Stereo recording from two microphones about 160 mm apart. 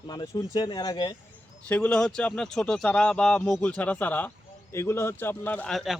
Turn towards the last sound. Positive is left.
turn(degrees=0)  # may be behind; listen again after turning